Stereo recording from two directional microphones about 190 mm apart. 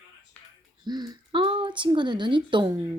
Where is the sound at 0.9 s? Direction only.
20° right (ahead or behind).